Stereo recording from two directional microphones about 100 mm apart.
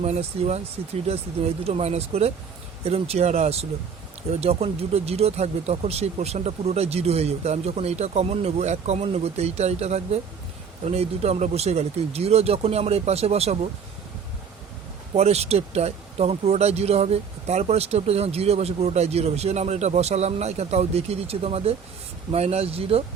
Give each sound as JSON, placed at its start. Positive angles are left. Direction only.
{"t": 0.0, "sound": "speech", "side_deg": -90}
{"t": 15.1, "sound": "speech", "side_deg": -90}